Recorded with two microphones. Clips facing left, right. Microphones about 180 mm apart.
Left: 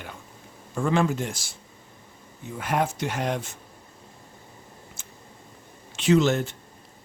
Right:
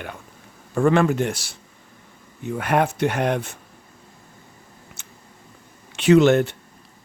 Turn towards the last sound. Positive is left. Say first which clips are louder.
# right 6 dB
turn(degrees=-65)  # may be behind; listen again after turning